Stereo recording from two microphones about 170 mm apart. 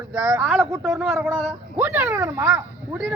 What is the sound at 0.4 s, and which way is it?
Speech, centre (ahead or behind).